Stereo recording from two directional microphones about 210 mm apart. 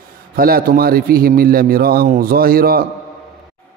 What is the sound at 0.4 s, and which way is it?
A man's voice, 45° right (ahead or behind).